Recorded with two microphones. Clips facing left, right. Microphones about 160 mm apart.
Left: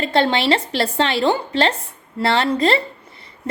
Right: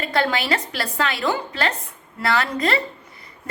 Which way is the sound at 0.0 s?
25° left (ahead or behind).